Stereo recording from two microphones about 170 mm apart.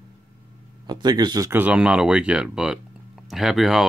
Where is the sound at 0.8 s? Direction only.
25° right (ahead or behind).